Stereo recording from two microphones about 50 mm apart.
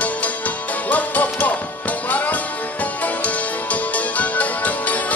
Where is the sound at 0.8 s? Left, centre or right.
Left.